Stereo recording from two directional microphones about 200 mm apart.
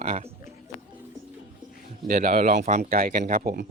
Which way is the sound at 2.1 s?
40° right (ahead or behind).